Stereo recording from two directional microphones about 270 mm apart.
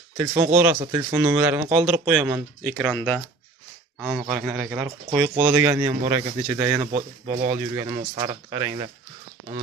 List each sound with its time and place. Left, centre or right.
0.2 s speech: centre
5.3 s speech: centre
6.7 s speech: centre